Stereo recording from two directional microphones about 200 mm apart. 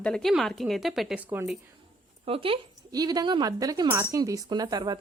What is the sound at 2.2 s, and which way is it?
A woman's voice, 25° right (ahead or behind).